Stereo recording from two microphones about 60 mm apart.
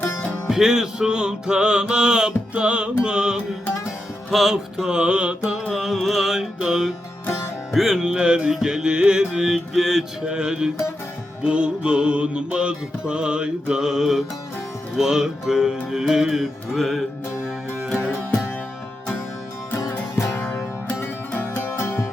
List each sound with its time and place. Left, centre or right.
0.4 s music: centre
21.0 s music: left